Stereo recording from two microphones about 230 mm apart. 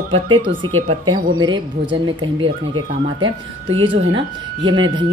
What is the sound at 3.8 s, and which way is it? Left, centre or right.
Speech, right.